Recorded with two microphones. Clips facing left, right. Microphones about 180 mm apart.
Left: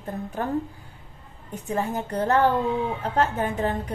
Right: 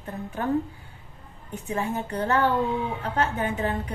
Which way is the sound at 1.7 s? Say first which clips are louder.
Left 2 dB; 40° left (ahead or behind).